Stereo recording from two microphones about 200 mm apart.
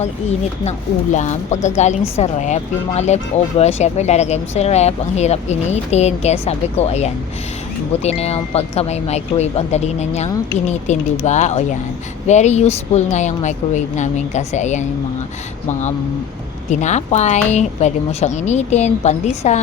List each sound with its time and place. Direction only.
0.0 s speech: 35° left (ahead or behind)
16.8 s speech: 35° left (ahead or behind)